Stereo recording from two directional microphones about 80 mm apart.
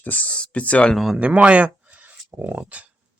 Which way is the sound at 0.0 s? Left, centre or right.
Centre.